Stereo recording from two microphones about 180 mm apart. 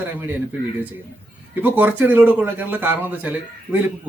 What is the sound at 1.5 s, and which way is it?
A man's voice, 10° right (ahead or behind).